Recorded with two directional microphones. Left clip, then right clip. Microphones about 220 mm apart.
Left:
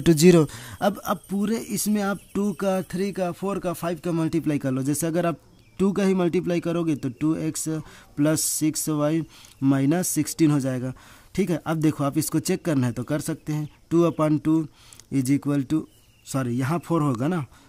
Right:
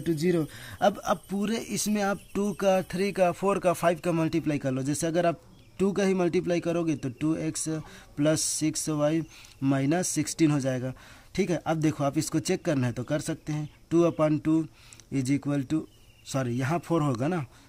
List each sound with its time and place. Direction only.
0.0 s speech: 45° left (ahead or behind); by 17.5 s 30° left (ahead or behind)